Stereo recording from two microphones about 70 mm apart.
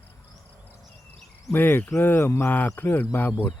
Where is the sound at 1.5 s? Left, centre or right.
Left.